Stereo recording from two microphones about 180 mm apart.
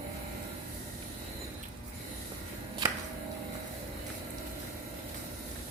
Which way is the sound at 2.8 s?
20° right (ahead or behind).